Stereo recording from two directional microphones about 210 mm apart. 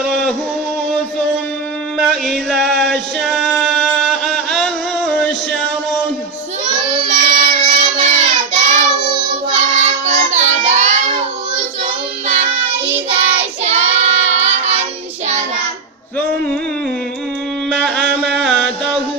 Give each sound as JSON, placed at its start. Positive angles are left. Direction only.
{"t": 0.1, "sound": "music", "side_deg": 0}
{"t": 2.0, "sound": "music", "side_deg": 0}
{"t": 7.1, "sound": "child singing", "side_deg": -35}
{"t": 12.9, "sound": "child singing", "side_deg": -30}
{"t": 17.7, "sound": "mantra", "side_deg": 0}
{"t": 18.2, "sound": "music", "side_deg": 0}